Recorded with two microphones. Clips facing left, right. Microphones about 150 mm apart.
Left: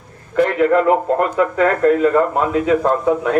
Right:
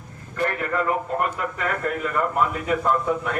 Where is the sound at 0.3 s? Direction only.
90° left.